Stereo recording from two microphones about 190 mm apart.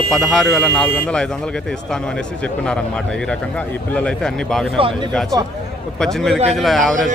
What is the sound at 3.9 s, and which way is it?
Speech, 5° left (ahead or behind).